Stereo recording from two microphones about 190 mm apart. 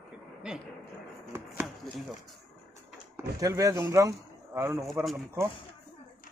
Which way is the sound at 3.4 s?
15° right (ahead or behind).